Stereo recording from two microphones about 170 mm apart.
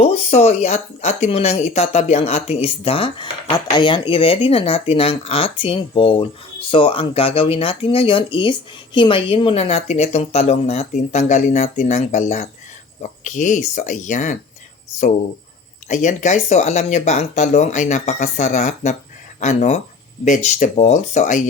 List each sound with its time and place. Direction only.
0.0 s speech: 35° left (ahead or behind)
15.9 s speech: 45° left (ahead or behind)